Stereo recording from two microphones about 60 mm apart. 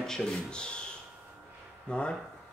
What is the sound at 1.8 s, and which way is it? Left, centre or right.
Speech, centre.